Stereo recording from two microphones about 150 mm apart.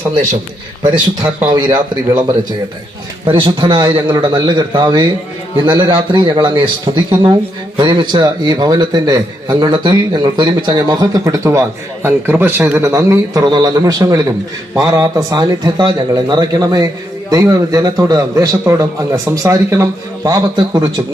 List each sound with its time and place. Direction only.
1.5 s speech: 30° right (ahead or behind)
3.2 s a man's voice: 35° right (ahead or behind)